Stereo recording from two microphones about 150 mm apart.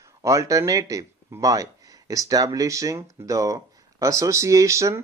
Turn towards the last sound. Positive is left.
turn(degrees=-20)  # may be behind; listen again after turning